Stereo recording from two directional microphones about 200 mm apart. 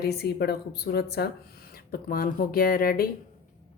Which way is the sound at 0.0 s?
55° left (ahead or behind).